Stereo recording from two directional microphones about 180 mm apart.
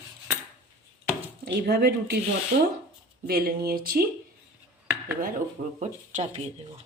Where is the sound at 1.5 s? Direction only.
65° right (ahead or behind).